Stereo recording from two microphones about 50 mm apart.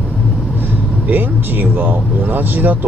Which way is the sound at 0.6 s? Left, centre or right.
Right.